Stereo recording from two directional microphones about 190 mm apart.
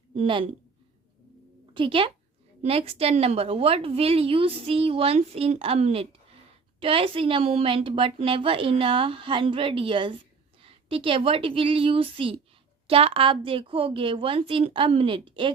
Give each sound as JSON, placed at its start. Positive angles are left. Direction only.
{"t": 0.1, "sound": "a woman's voice", "side_deg": -30}
{"t": 1.7, "sound": "a woman's voice", "side_deg": -25}